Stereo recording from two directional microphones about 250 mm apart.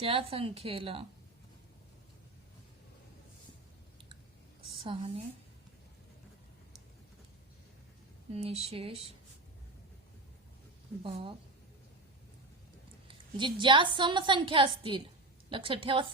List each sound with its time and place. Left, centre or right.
0.0 s a woman's voice: right
4.8 s a woman's voice: right
8.3 s a woman's voice: right
11.0 s a woman's voice: right
13.1 s a woman's voice: centre